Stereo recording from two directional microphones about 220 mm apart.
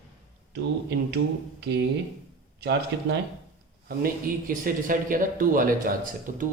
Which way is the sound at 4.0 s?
40° right (ahead or behind).